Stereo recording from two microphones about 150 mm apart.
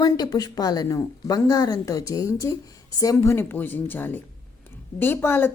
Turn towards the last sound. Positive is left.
turn(degrees=15)  # may be behind; listen again after turning